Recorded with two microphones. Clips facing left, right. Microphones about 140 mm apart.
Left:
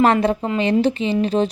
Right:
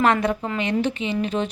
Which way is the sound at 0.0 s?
30° left (ahead or behind).